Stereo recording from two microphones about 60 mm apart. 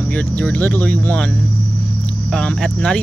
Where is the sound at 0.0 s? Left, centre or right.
Left.